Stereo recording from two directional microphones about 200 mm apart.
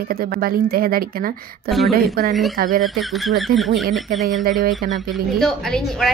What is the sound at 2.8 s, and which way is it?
Speech, centre (ahead or behind).